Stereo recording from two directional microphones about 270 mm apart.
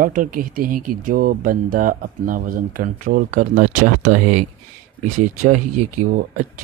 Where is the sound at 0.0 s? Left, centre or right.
Right.